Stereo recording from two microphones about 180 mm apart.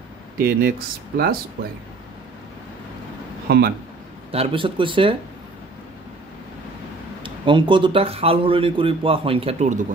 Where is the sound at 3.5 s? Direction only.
60° right (ahead or behind).